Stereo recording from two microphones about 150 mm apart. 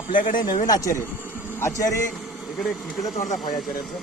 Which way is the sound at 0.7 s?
25° left (ahead or behind).